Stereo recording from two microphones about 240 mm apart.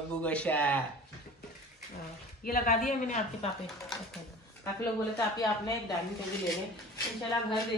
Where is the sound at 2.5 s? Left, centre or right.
Left.